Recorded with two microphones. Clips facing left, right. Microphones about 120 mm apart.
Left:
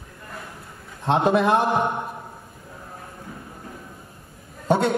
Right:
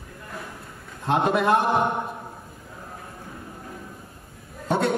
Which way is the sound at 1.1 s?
30° left (ahead or behind).